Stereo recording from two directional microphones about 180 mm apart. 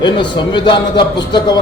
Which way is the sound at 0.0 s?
25° left (ahead or behind).